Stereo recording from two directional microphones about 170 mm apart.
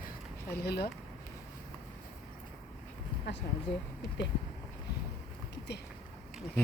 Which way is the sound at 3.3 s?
90° left.